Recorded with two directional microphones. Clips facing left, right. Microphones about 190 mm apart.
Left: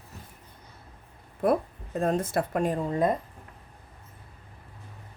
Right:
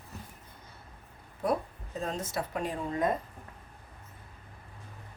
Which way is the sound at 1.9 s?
55° left (ahead or behind).